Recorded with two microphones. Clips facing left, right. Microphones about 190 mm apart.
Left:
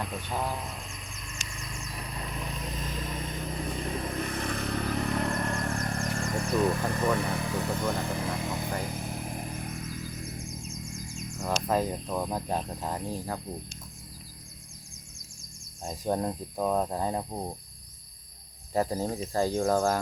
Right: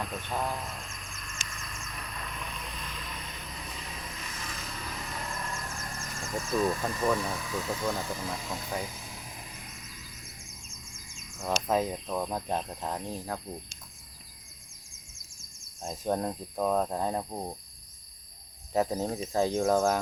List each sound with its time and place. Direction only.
0.0 s insect: 5° left (ahead or behind); by 6.3 s 65° left (ahead or behind)
6.4 s speech: 65° left (ahead or behind)
8.8 s music: 55° left (ahead or behind)
11.3 s speech: centre (ahead or behind)
15.4 s speech: centre (ahead or behind)
18.7 s speech: centre (ahead or behind)